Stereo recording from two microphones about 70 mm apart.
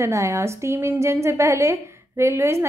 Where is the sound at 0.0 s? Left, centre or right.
Right.